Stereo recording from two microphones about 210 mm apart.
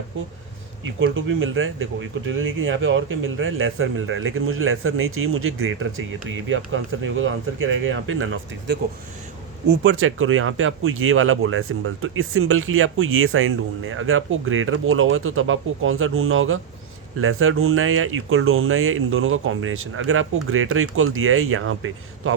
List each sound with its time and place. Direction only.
0.9 s speech: 70° right (ahead or behind)